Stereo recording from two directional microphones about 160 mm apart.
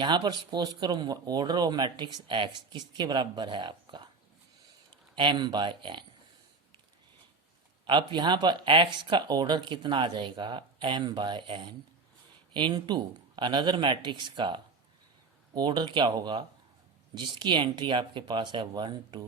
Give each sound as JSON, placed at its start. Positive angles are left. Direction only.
{"t": 0.0, "sound": "speech", "side_deg": -25}
{"t": 7.9, "sound": "speech", "side_deg": -30}